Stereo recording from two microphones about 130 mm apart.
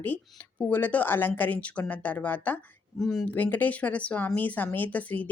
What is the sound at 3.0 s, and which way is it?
Speech, 5° left (ahead or behind).